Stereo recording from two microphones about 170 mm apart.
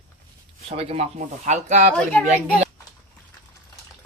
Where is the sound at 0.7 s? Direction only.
35° right (ahead or behind).